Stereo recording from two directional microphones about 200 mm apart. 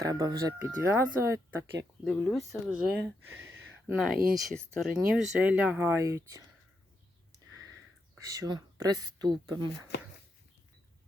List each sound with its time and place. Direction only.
0.0 s speech: 20° right (ahead or behind)
2.0 s speech: 5° left (ahead or behind)
2.5 s speech: 5° right (ahead or behind)
3.4 s a sound: 5° right (ahead or behind)
4.4 s speech: centre (ahead or behind)
8.2 s speech: 15° right (ahead or behind)